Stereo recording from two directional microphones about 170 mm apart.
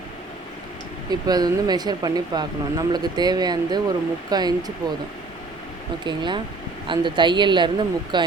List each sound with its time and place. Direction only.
1.1 s speech: 25° right (ahead or behind)
6.1 s speech: 25° right (ahead or behind)